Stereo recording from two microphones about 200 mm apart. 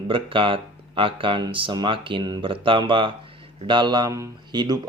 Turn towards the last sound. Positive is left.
turn(degrees=-20)  # may be behind; listen again after turning